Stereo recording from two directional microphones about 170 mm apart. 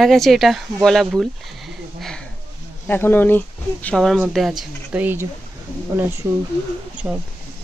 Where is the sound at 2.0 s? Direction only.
Centre (ahead or behind).